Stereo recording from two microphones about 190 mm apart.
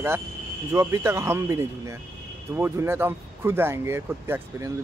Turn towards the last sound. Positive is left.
turn(degrees=-10)  # may be behind; listen again after turning